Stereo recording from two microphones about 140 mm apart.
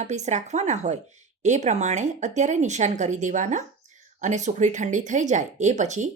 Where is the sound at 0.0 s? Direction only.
55° right (ahead or behind).